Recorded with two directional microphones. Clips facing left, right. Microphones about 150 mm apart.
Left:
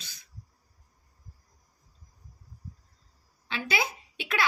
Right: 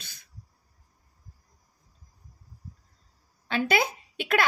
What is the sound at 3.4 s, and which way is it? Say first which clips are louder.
A woman's voice: right 6 dB; 50° right (ahead or behind).